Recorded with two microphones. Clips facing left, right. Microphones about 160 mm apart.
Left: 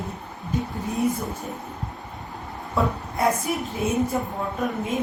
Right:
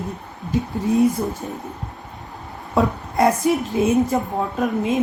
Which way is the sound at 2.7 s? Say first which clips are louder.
Right 6 dB; 80° right.